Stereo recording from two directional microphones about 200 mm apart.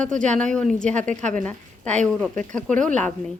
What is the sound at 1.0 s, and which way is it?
Speech, 35° right (ahead or behind).